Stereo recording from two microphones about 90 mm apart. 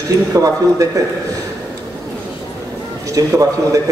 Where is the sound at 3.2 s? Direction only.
40° right (ahead or behind).